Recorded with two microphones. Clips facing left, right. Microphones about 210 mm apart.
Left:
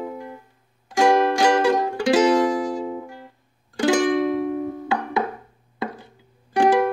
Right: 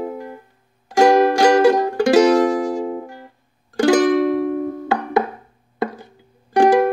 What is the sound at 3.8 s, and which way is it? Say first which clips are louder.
Music: right 4 dB; 60° right (ahead or behind).